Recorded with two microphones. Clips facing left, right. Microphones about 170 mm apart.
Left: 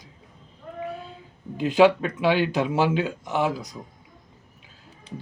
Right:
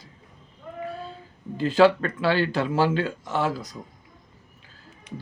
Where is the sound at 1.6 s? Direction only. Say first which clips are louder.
Left 1 dB; 15° left (ahead or behind).